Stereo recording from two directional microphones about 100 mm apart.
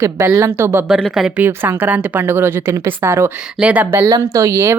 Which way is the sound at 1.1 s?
5° right (ahead or behind).